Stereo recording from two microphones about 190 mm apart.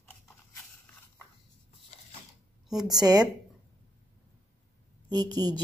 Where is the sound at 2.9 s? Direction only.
20° right (ahead or behind).